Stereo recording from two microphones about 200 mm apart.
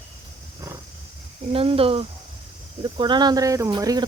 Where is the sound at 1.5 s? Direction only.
30° right (ahead or behind).